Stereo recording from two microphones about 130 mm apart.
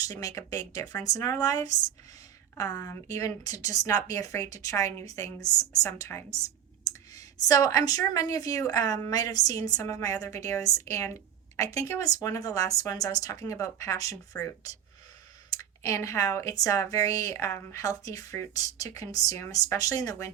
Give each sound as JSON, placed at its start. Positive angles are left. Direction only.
{"t": 0.2, "sound": "a woman's voice", "side_deg": 25}